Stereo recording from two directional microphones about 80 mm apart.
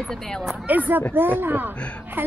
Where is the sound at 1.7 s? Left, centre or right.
Centre.